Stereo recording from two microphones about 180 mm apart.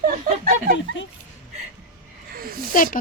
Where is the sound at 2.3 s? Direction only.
55° right (ahead or behind).